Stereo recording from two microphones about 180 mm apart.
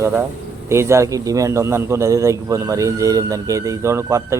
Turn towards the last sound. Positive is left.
turn(degrees=-15)  # may be behind; listen again after turning